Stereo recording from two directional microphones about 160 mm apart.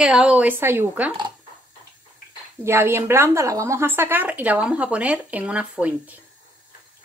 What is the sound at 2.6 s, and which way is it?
A woman's voice, 15° right (ahead or behind).